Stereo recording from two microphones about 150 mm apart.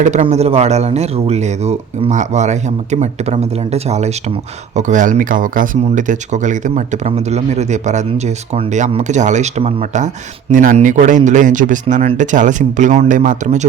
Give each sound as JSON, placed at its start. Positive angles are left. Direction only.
{"t": 0.0, "sound": "speech", "side_deg": -50}